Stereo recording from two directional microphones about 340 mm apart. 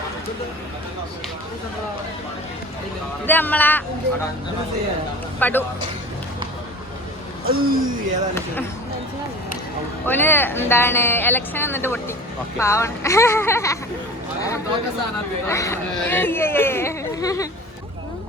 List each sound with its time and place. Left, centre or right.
3.2 s speech: centre
5.4 s speech: centre
7.4 s speech: right
10.1 s speech: centre
15.4 s speech: centre